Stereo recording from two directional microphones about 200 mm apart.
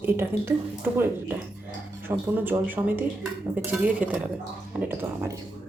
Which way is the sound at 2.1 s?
10° right (ahead or behind).